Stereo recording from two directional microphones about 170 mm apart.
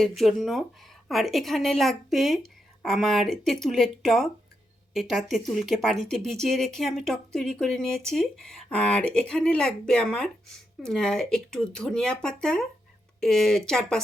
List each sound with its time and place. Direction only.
0.0 s speech: centre (ahead or behind)